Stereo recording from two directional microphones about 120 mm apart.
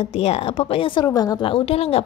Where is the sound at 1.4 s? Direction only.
50° left (ahead or behind).